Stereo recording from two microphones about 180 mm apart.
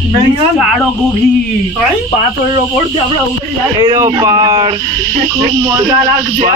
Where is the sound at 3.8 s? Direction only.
25° right (ahead or behind).